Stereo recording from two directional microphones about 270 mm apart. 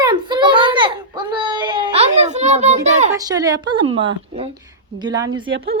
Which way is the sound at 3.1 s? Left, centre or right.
Centre.